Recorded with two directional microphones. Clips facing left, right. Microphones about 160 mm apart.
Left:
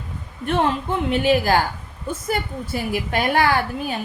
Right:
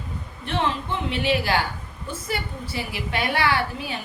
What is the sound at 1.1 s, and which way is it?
A woman's voice, 45° left (ahead or behind).